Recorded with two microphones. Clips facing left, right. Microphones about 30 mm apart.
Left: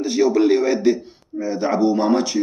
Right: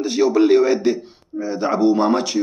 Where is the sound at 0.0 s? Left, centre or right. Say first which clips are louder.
Right 1 dB; right.